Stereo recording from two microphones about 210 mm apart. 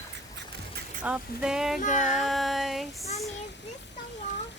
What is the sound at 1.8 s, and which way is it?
Music, 35° left (ahead or behind).